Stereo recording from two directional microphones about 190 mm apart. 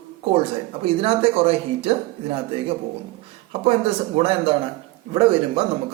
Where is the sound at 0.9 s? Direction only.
30° right (ahead or behind).